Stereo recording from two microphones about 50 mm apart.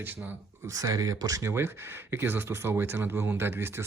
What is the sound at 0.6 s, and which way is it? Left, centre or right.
Speech, right.